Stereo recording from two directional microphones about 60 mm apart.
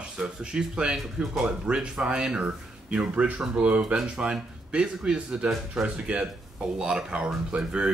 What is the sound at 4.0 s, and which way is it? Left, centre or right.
Speech, centre.